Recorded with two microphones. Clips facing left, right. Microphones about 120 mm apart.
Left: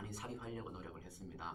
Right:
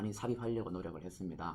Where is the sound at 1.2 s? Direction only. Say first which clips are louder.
Right 11 dB; 35° right (ahead or behind).